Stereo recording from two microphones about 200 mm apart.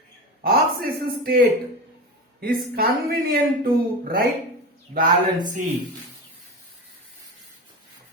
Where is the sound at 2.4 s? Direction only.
50° right (ahead or behind).